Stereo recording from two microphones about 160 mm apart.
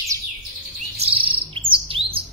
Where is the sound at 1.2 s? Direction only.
35° right (ahead or behind).